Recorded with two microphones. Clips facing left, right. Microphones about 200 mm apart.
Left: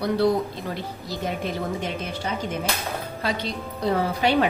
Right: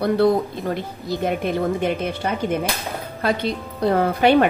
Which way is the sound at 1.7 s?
60° right (ahead or behind).